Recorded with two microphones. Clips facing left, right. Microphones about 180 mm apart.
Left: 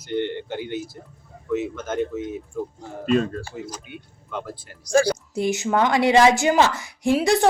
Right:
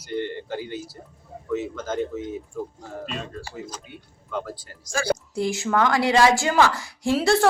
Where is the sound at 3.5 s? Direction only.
20° left (ahead or behind).